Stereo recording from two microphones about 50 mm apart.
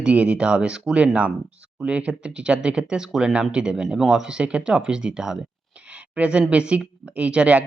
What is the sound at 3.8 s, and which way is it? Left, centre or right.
Speech, centre.